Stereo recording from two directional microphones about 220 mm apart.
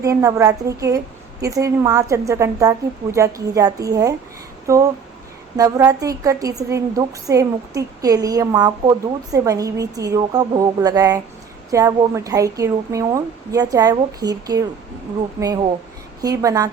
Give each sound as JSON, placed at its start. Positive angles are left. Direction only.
{"t": 0.0, "sound": "a woman's voice", "side_deg": -15}
{"t": 4.6, "sound": "a sound", "side_deg": -15}
{"t": 5.5, "sound": "a woman's voice", "side_deg": -15}